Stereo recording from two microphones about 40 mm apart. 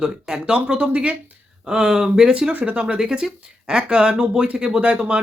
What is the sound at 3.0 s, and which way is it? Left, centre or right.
Speech, centre.